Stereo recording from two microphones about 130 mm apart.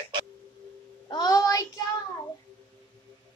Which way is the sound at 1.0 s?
30° left (ahead or behind).